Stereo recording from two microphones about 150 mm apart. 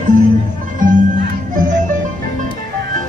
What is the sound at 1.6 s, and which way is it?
Music, 60° right (ahead or behind).